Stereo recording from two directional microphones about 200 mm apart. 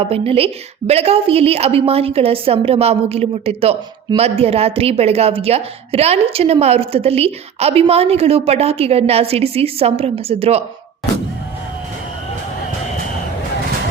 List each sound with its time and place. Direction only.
0.0 s a woman's voice: 30° right (ahead or behind)